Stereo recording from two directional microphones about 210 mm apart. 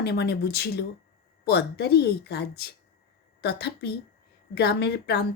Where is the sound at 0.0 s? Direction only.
50° left (ahead or behind).